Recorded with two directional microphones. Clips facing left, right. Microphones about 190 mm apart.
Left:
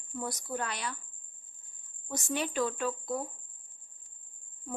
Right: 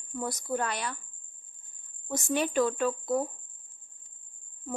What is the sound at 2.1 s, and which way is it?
Speech, 50° right (ahead or behind).